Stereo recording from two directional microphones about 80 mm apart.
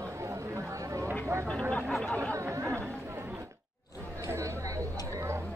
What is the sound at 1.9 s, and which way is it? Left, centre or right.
Chatter, centre.